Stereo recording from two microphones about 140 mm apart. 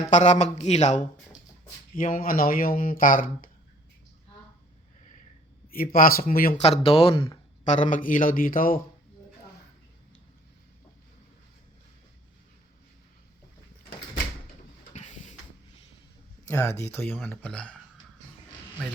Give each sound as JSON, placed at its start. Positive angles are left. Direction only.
{"t": 0.1, "sound": "speech", "side_deg": 60}
{"t": 2.0, "sound": "speech", "side_deg": 80}
{"t": 5.7, "sound": "speech", "side_deg": 90}
{"t": 6.6, "sound": "speech", "side_deg": 45}
{"t": 7.6, "sound": "speech", "side_deg": 60}
{"t": 14.9, "sound": "a sound", "side_deg": 60}
{"t": 16.5, "sound": "speech", "side_deg": 20}